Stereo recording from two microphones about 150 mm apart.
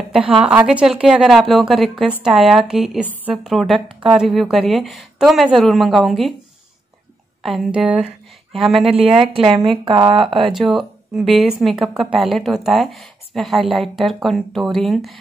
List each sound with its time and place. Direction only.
0.3 s speech: 5° right (ahead or behind)
7.4 s speech: centre (ahead or behind)
9.2 s speech: 35° right (ahead or behind)
10.5 s speech: centre (ahead or behind)